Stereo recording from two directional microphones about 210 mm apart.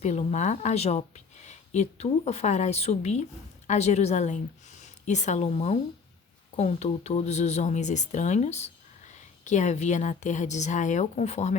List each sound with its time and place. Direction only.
0.0 s a woman's voice: 30° left (ahead or behind)